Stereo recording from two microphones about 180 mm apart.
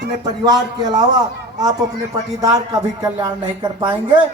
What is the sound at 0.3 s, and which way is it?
A man's voice, 20° right (ahead or behind).